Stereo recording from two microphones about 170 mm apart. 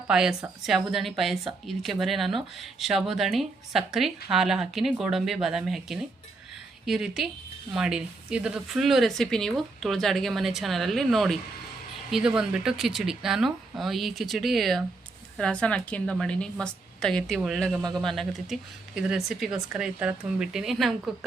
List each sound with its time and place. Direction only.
0.1 s speech: 5° right (ahead or behind)